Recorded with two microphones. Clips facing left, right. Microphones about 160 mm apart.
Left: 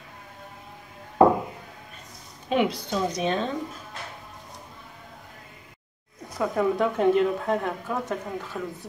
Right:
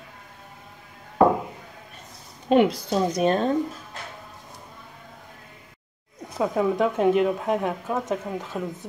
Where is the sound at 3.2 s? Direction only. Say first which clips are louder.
Right 7 dB; 45° right (ahead or behind).